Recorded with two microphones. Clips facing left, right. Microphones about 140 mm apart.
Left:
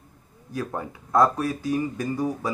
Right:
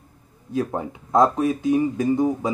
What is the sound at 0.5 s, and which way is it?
Speech, 25° right (ahead or behind).